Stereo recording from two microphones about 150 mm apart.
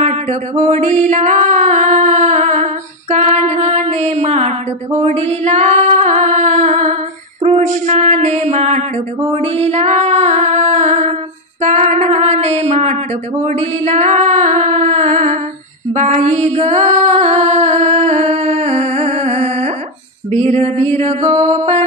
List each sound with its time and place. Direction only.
0.0 s music: 50° right (ahead or behind)
5.0 s female singing: 50° right (ahead or behind)